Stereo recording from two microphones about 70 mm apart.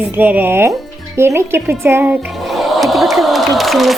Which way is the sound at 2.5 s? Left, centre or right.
Centre.